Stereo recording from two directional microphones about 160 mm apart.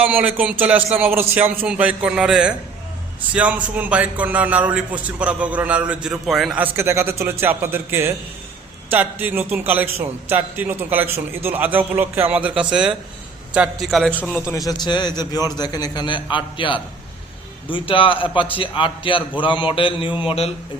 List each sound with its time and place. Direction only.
0.0 s a man's voice: 10° right (ahead or behind)
14.7 s a man's voice: 25° left (ahead or behind)